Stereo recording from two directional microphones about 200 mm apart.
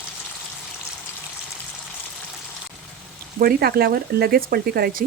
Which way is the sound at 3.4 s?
50° right (ahead or behind).